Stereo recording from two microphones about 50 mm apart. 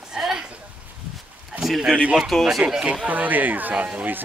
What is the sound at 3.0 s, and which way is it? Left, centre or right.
Speech, right.